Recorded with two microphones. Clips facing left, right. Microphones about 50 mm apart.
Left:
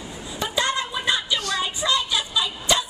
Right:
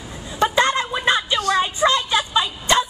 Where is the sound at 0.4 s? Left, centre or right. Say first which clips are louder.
Right 7 dB; right.